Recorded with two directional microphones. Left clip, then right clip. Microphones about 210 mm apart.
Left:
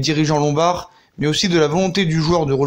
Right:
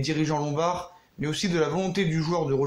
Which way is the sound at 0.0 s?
40° left (ahead or behind).